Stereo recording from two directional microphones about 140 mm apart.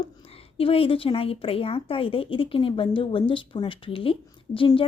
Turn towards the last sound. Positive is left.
turn(degrees=40)  # may be behind; listen again after turning